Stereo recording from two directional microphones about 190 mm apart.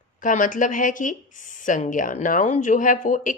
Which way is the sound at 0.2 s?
45° left (ahead or behind).